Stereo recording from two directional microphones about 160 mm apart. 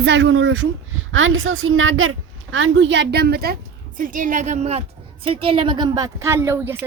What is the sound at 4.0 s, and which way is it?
A woman's voice, 55° right (ahead or behind).